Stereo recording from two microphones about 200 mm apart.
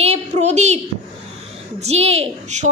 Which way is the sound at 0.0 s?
35° right (ahead or behind).